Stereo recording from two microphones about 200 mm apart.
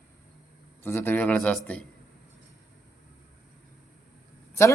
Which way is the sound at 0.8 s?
15° left (ahead or behind).